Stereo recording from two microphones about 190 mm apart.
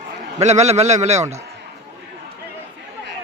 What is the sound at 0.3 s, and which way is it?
Speech, 35° right (ahead or behind).